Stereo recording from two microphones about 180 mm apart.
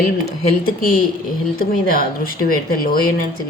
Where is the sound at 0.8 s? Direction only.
55° left (ahead or behind).